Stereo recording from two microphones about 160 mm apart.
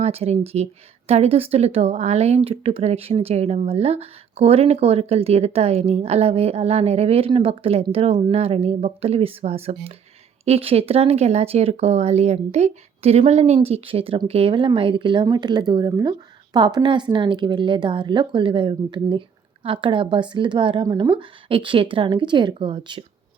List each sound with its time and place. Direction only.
0.0 s speech: 40° right (ahead or behind)